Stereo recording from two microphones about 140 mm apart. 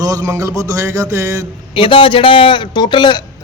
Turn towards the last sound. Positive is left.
turn(degrees=35)  # may be behind; listen again after turning